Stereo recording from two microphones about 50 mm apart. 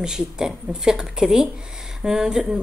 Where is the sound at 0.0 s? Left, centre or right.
Centre.